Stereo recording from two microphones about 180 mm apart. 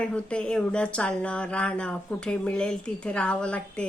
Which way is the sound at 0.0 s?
5° left (ahead or behind).